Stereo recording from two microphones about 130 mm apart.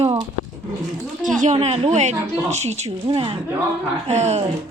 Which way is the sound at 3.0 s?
40° right (ahead or behind).